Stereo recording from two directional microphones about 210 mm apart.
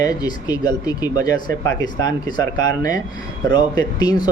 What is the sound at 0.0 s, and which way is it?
Speech, 20° left (ahead or behind).